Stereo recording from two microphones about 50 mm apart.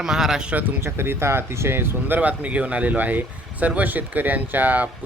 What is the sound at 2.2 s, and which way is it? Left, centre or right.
Speech, right.